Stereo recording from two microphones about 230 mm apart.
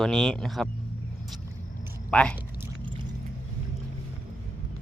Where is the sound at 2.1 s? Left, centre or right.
Centre.